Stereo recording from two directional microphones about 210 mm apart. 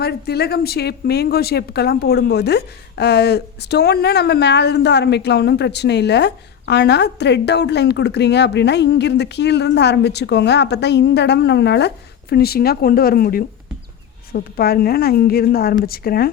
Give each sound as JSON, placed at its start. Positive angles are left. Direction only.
{"t": 0.0, "sound": "speech", "side_deg": 50}